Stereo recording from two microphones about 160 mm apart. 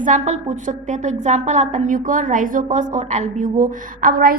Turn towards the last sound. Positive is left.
turn(degrees=-65)  # may be behind; listen again after turning